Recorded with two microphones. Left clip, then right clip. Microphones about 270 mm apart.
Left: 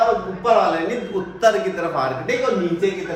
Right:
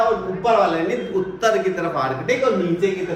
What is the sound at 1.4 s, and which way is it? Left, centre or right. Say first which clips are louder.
Speech: left 2 dB; centre.